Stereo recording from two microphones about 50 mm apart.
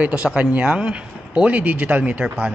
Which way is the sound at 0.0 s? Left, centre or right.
Right.